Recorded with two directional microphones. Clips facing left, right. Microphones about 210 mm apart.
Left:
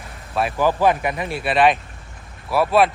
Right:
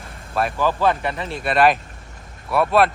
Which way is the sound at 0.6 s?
15° left (ahead or behind).